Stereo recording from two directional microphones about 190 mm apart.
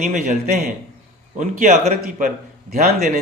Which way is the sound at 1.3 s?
40° right (ahead or behind).